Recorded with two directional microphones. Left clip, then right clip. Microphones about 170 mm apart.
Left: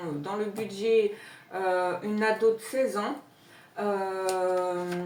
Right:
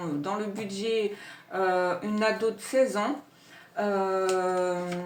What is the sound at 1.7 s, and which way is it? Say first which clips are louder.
Speech: right 1 dB; 45° right (ahead or behind).